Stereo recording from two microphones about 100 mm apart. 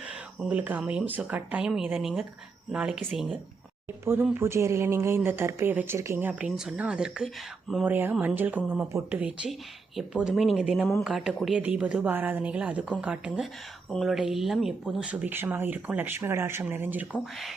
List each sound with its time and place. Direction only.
0.4 s speech: 15° right (ahead or behind)
1.7 s a woman's voice: 5° right (ahead or behind)
4.0 s speech: 25° right (ahead or behind); by 7.3 s 10° right (ahead or behind)
7.9 s speech: 20° right (ahead or behind)
9.5 s a woman's voice: 5° right (ahead or behind)